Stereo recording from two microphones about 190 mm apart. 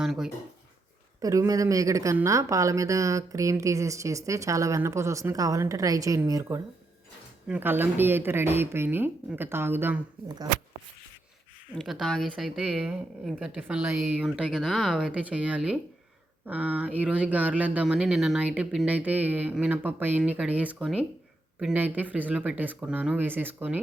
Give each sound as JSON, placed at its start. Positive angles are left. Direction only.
{"t": 0.0, "sound": "speech", "side_deg": 0}
{"t": 1.2, "sound": "speech", "side_deg": -15}
{"t": 11.7, "sound": "speech", "side_deg": 0}